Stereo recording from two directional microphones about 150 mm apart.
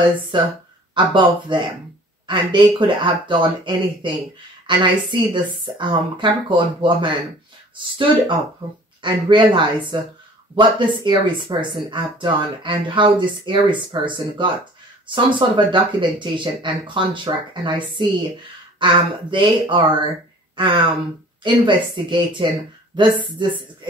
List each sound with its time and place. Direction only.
0.3 s speech: 30° right (ahead or behind)